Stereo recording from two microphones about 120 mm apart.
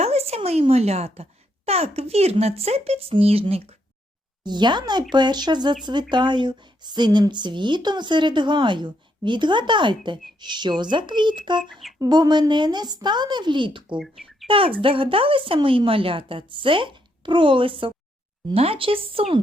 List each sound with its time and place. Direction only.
0.0 s speech: 60° right (ahead or behind)
4.4 s speech: 40° right (ahead or behind)
11.7 s a sound: centre (ahead or behind)
11.9 s speech: 35° right (ahead or behind)
13.9 s speech: centre (ahead or behind)
14.4 s speech: 50° right (ahead or behind)